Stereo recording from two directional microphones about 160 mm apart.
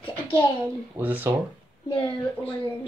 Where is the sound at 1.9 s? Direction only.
35° left (ahead or behind).